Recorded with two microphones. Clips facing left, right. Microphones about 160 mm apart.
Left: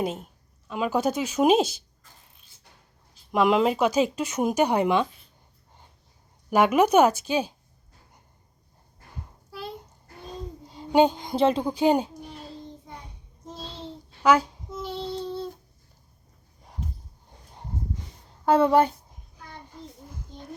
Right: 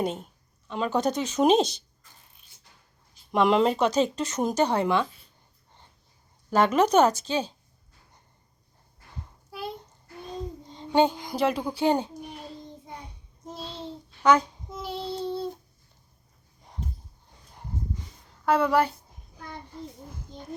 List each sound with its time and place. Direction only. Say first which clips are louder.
0.0 s a woman's voice: even; 5° left (ahead or behind)
3.3 s speech: even; 5° left (ahead or behind)
6.5 s speech: left 2 dB; 10° left (ahead or behind)
10.7 s speech: left 3 dB; 10° left (ahead or behind)
13.5 s a sound: right 1 dB; 10° right (ahead or behind)
14.2 s speech: left 1 dB; 5° left (ahead or behind)
14.7 s child singing: left 1 dB; 10° right (ahead or behind)
18.4 s a woman's voice: left 3 dB; 25° left (ahead or behind)